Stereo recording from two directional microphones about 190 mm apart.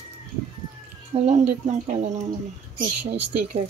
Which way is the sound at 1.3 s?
35° right (ahead or behind).